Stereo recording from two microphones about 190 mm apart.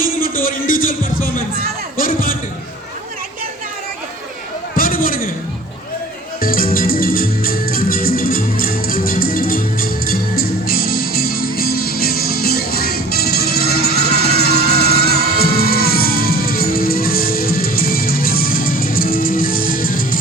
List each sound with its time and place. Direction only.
0.0 s music: 45° left (ahead or behind)
4.8 s a sound: 50° left (ahead or behind)
6.4 s music: 50° left (ahead or behind)